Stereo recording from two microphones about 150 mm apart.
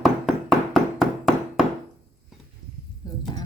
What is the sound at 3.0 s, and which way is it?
Stir, 25° left (ahead or behind).